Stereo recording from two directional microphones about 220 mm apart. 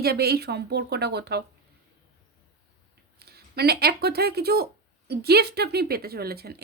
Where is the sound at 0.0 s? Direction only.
45° right (ahead or behind).